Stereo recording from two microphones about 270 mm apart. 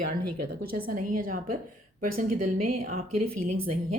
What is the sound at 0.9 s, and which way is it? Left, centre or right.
A woman's voice, right.